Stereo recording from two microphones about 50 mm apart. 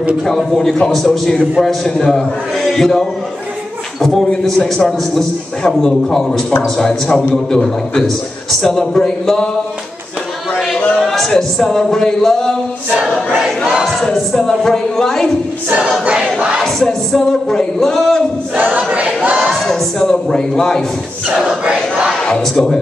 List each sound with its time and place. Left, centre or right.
0.3 s chant: centre
0.8 s a man's voice: centre
2.6 s chant: centre
4.5 s a man's voice: centre
11.0 s music: centre
13.4 s choir: centre
14.1 s a man's voice: centre
16.8 s a man's voice: centre
18.8 s a sound: right
19.5 s a man's voice: centre
21.6 s battle cry: centre
22.2 s speech: centre